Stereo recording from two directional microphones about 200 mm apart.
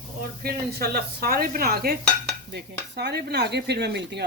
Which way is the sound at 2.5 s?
55° right (ahead or behind).